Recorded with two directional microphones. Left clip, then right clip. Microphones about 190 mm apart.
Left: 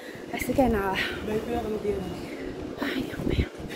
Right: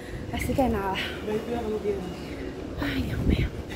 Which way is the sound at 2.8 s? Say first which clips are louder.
Even; 5° left (ahead or behind).